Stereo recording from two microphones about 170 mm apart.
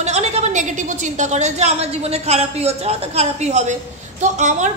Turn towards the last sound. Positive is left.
turn(degrees=-45)  # may be behind; listen again after turning